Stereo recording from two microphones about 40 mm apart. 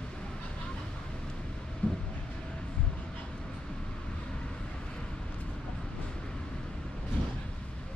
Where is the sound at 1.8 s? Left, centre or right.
Left.